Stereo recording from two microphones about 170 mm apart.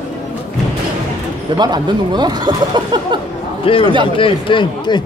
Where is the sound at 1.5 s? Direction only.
25° right (ahead or behind).